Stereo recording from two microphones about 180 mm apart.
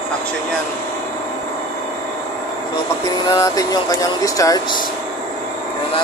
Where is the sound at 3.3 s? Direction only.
20° left (ahead or behind).